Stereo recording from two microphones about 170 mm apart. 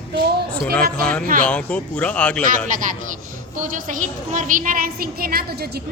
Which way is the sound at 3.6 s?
50° right (ahead or behind).